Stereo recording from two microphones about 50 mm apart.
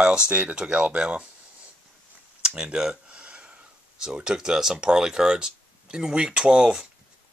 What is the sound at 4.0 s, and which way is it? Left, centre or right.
Speech, centre.